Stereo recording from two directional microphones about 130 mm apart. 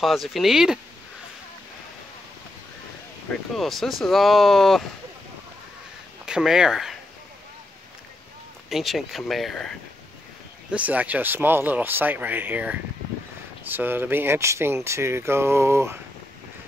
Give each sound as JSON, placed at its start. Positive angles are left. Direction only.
{"t": 0.0, "sound": "speech", "side_deg": 0}
{"t": 3.5, "sound": "speech", "side_deg": 0}
{"t": 6.2, "sound": "speech", "side_deg": -5}
{"t": 8.6, "sound": "speech", "side_deg": 0}
{"t": 10.7, "sound": "speech", "side_deg": -10}